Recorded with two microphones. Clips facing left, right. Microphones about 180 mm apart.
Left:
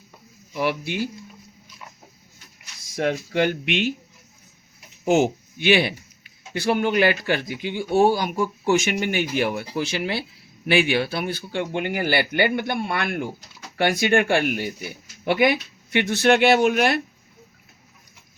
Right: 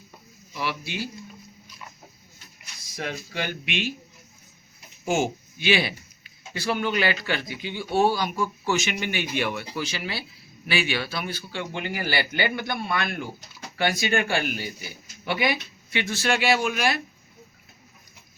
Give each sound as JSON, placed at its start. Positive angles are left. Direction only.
{"t": 0.5, "sound": "a man's voice", "side_deg": 50}
{"t": 2.9, "sound": "speech", "side_deg": 60}
{"t": 5.0, "sound": "a man's voice", "side_deg": 60}